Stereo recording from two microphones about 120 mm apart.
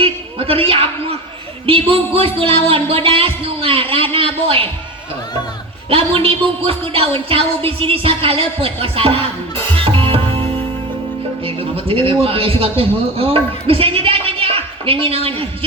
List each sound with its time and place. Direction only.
0.0 s a sound: 50° right (ahead or behind)
1.6 s a woman's voice: 50° right (ahead or behind)
5.9 s a woman's voice: 50° right (ahead or behind)
9.8 s music: 50° right (ahead or behind)
11.4 s a woman's voice: 50° right (ahead or behind)